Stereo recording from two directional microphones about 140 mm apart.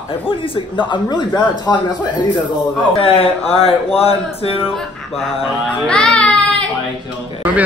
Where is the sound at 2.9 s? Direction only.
40° left (ahead or behind).